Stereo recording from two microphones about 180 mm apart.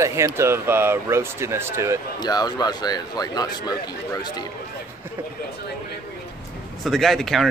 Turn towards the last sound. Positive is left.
turn(degrees=0)  # may be behind; listen again after turning